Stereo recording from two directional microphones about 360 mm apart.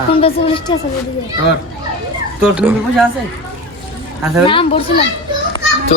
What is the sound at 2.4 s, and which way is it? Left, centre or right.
Speech, centre.